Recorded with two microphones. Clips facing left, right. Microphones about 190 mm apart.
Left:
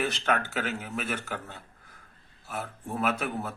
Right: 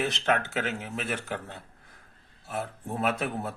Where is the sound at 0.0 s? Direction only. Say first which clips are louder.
Right 1 dB; 20° right (ahead or behind).